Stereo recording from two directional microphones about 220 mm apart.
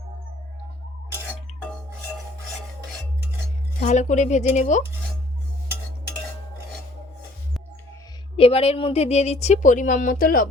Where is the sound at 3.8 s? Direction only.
35° left (ahead or behind).